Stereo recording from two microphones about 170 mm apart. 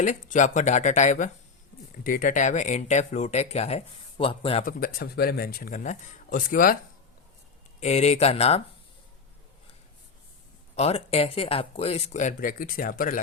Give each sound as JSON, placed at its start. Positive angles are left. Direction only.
{"t": 0.0, "sound": "speech", "side_deg": 45}
{"t": 4.6, "sound": "speech", "side_deg": 60}
{"t": 7.8, "sound": "speech", "side_deg": 40}
{"t": 10.8, "sound": "speech", "side_deg": 35}